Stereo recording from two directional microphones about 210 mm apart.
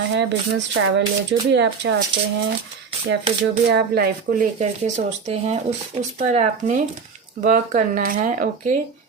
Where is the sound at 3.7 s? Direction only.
50° right (ahead or behind).